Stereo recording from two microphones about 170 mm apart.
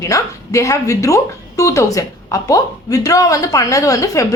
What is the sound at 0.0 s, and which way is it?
A woman's voice, 20° left (ahead or behind).